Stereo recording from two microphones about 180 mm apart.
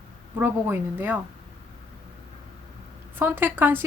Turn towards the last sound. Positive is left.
turn(degrees=-10)  # may be behind; listen again after turning